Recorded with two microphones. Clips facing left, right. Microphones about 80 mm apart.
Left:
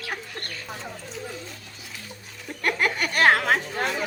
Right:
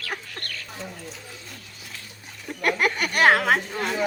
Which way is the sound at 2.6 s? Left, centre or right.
Centre.